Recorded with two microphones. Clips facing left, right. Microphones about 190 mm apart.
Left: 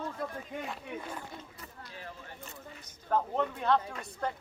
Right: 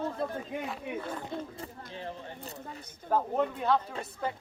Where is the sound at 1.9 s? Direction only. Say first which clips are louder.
Right 6 dB; 30° right (ahead or behind).